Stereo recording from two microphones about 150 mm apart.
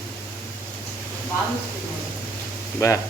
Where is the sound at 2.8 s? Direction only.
20° left (ahead or behind).